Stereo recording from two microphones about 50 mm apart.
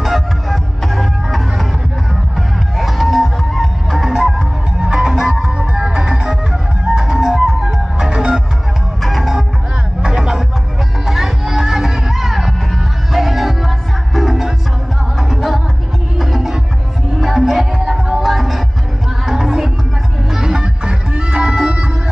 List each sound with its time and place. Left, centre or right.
0.0 s music: centre
2.8 s music: centre
9.0 s music: centre
10.0 s music: centre